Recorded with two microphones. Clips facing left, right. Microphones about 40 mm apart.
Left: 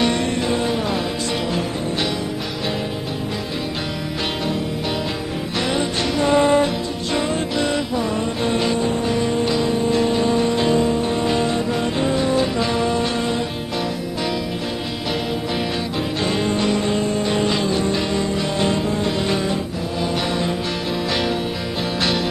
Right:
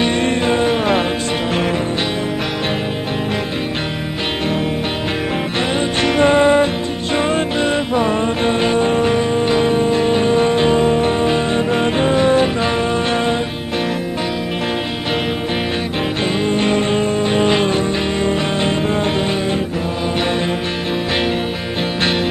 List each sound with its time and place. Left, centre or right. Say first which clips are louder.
0.2 s music: right 5 dB; right
5.8 s music: right 8 dB; right
6.3 s music: right 3 dB; right
7.9 s music: right 5 dB; right
11.1 s music: right 3 dB; right
16.5 s music: right 4 dB; right